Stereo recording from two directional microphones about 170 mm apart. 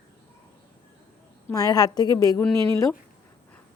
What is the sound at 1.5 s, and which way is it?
Speech, 20° left (ahead or behind).